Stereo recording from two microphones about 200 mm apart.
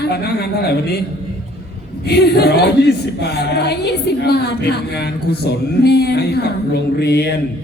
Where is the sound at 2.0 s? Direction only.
55° left (ahead or behind).